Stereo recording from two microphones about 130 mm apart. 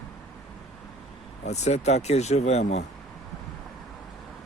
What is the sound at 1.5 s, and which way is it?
Speech, 60° left (ahead or behind).